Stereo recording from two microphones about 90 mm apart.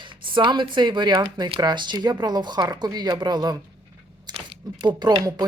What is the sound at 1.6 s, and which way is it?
Speech, 55° right (ahead or behind).